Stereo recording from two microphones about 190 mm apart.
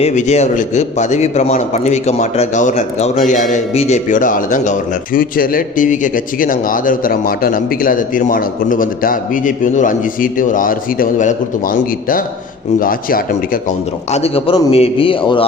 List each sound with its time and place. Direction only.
0.0 s a man's voice: 40° left (ahead or behind)